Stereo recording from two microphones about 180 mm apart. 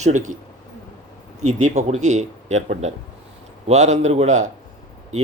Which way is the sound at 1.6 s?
40° right (ahead or behind).